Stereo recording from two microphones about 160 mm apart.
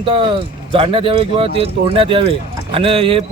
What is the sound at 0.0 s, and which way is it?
A man's voice, 35° right (ahead or behind).